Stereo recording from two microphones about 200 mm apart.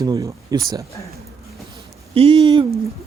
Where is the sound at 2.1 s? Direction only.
30° right (ahead or behind).